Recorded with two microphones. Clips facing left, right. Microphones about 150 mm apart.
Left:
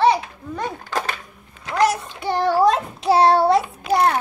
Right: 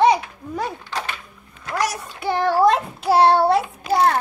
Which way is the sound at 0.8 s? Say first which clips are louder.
Left 3 dB; 45° left (ahead or behind).